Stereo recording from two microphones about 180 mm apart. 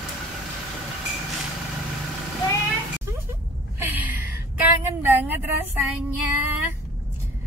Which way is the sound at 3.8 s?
10° right (ahead or behind).